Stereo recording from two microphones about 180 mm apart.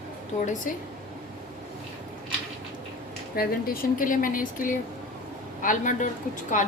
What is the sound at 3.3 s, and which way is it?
Speech, 55° left (ahead or behind).